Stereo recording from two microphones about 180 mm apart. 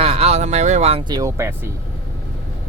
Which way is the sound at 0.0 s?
35° right (ahead or behind).